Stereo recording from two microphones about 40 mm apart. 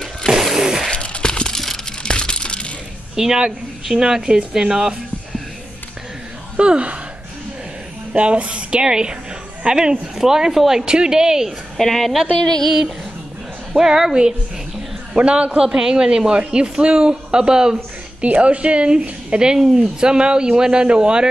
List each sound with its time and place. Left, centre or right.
0.2 s a sound: centre
0.6 s a sound: centre
0.9 s a sound: left
3.2 s speech: centre
6.5 s speech: right
8.1 s a man's voice: right; by 11.5 s centre
11.7 s a woman's voice: centre
13.7 s speech: centre
15.1 s a man's voice: right
18.2 s a man's voice: right
19.6 s speech: centre
20.0 s a man's voice: right